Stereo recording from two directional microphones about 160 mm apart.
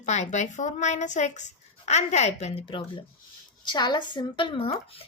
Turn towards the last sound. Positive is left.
turn(degrees=35)  # may be behind; listen again after turning